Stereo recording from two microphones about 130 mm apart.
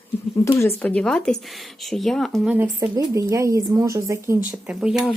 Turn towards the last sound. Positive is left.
turn(degrees=-5)  # may be behind; listen again after turning